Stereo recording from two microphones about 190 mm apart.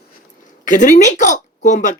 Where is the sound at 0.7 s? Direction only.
40° left (ahead or behind).